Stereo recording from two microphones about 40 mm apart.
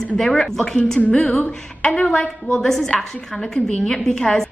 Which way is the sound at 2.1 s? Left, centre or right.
Centre.